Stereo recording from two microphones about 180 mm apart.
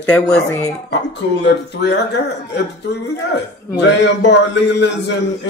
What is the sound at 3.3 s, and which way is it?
A man's voice, 70° left (ahead or behind).